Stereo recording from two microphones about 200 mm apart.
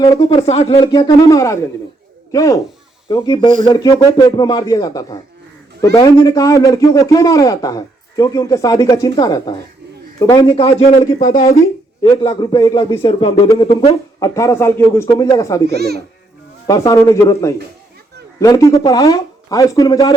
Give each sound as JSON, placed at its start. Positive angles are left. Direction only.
{"t": 0.2, "sound": "speech", "side_deg": 30}
{"t": 0.9, "sound": "a man's voice", "side_deg": 15}
{"t": 11.0, "sound": "a man's voice", "side_deg": 20}
{"t": 15.6, "sound": "speech", "side_deg": -55}
{"t": 16.6, "sound": "a man's voice", "side_deg": 15}